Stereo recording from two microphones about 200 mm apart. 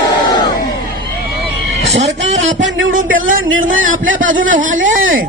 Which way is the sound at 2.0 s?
65° right (ahead or behind).